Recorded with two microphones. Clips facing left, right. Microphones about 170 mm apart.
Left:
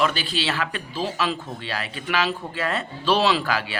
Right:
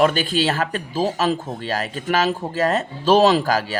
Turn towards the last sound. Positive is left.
turn(degrees=-40)  # may be behind; listen again after turning